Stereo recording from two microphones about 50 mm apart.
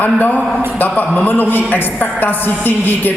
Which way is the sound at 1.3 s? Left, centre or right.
Left.